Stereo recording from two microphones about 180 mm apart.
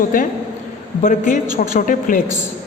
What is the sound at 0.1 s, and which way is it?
A woman's voice, 50° left (ahead or behind).